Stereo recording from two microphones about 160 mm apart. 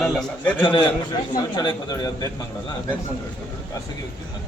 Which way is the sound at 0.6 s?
30° left (ahead or behind).